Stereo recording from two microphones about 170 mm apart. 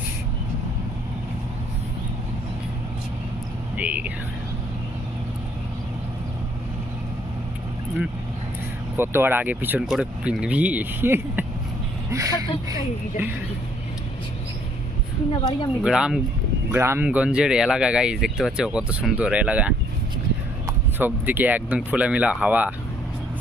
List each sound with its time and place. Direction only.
3.8 s speech: 10° right (ahead or behind)
9.0 s speech: 10° right (ahead or behind)
15.3 s speech: 25° left (ahead or behind)
15.8 s speech: 5° right (ahead or behind)
21.0 s speech: 10° right (ahead or behind)